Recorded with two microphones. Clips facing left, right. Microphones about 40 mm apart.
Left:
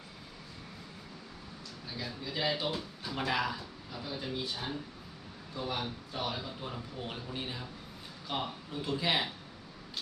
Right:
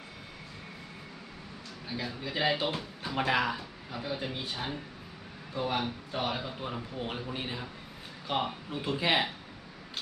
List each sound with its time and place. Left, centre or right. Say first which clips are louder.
1.9 s speech: right 4 dB; right